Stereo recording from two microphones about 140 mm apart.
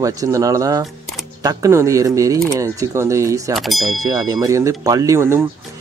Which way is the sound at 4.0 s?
25° right (ahead or behind).